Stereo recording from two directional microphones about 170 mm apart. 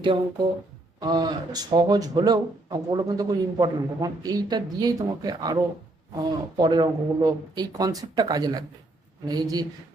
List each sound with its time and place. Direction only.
0.9 s speech: 25° right (ahead or behind)